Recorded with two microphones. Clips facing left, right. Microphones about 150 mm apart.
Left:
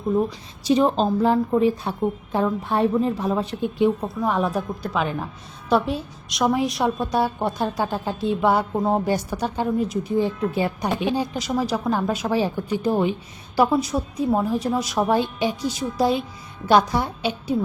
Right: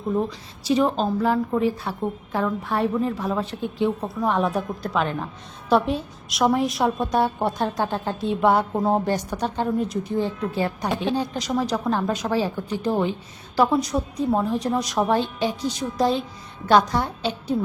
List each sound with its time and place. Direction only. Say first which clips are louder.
0.6 s a woman's voice: left 2 dB; 25° left (ahead or behind)
4.0 s a woman's voice: even; centre (ahead or behind)